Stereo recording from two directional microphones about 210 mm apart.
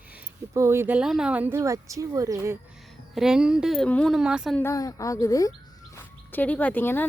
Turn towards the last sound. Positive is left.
turn(degrees=10)  # may be behind; listen again after turning